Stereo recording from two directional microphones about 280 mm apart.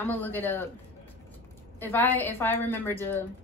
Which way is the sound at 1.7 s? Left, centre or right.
Centre.